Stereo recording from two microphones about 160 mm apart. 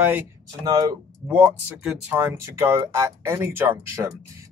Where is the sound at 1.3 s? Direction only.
10° right (ahead or behind).